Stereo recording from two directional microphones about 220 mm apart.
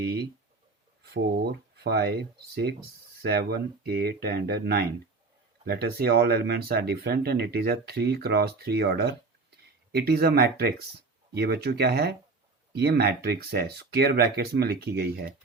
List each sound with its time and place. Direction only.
0.0 s speech: 45° right (ahead or behind)